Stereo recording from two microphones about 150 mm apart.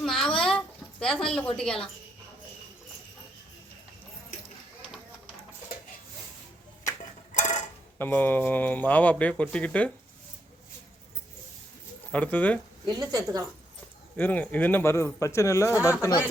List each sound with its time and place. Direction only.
0.0 s a sound: 5° left (ahead or behind)
7.3 s mechanisms: 55° left (ahead or behind)
7.9 s speech: 15° left (ahead or behind)
12.1 s speech: 10° left (ahead or behind)
12.8 s a woman's voice: 25° right (ahead or behind)
14.2 s speech: 10° left (ahead or behind)